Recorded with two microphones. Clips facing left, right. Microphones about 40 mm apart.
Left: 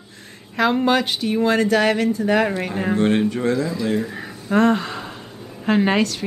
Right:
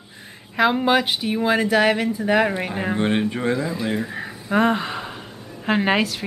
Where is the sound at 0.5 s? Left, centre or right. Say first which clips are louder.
Even; centre.